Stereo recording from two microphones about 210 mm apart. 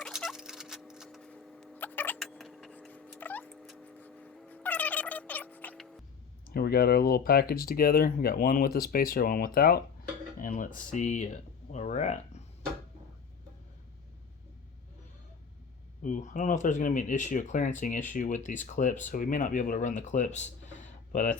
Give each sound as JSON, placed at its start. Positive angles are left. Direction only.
{"t": 0.0, "sound": "fowl", "side_deg": 0}
{"t": 6.5, "sound": "speech", "side_deg": 45}
{"t": 16.0, "sound": "speech", "side_deg": 35}